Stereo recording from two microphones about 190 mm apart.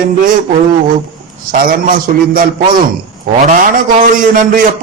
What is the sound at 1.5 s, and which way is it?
A man's voice, 45° right (ahead or behind).